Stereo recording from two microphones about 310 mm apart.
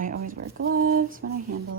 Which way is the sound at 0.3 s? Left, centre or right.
Right.